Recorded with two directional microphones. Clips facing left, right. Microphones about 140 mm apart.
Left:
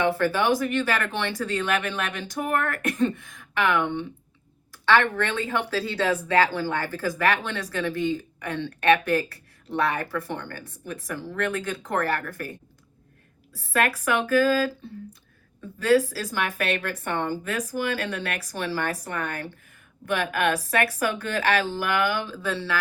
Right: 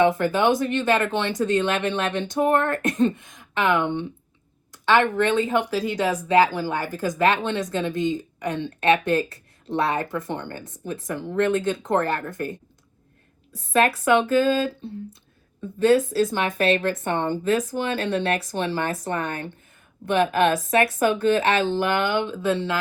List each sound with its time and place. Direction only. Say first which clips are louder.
0.0 s speech: right 4 dB; 20° right (ahead or behind)
15.8 s speech: right 3 dB; 25° right (ahead or behind)